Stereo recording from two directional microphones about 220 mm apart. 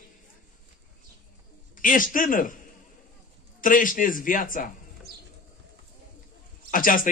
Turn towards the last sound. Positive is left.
turn(degrees=40)  # may be behind; listen again after turning